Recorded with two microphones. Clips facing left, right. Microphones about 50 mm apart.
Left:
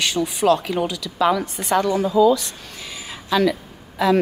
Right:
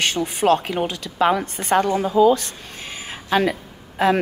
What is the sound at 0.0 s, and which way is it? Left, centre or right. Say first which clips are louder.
A woman's voice: even; right.